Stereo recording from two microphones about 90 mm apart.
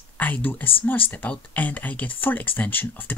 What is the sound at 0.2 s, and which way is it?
Speech, 20° left (ahead or behind).